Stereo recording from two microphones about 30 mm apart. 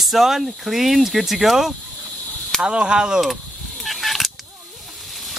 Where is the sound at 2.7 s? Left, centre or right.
Right.